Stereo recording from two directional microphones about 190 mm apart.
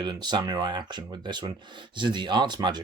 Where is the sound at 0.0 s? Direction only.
25° right (ahead or behind).